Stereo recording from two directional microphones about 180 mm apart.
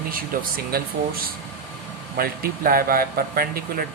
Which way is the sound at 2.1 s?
55° right (ahead or behind).